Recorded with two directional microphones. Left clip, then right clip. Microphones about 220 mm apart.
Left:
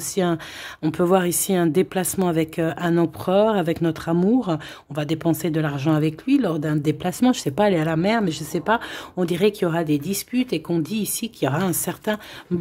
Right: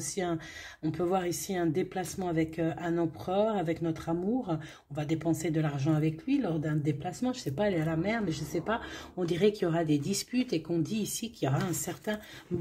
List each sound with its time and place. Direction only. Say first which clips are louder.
0.1 s speech: left 11 dB; 35° left (ahead or behind)